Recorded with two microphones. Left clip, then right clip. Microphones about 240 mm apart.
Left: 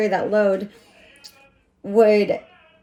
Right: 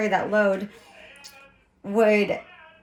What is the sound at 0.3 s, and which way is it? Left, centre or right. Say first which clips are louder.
Speech: left 3 dB; right.